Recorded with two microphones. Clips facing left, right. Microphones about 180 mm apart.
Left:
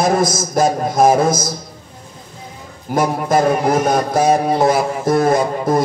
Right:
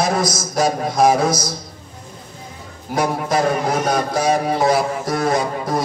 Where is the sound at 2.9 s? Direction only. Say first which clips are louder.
Left 3 dB; 50° left (ahead or behind).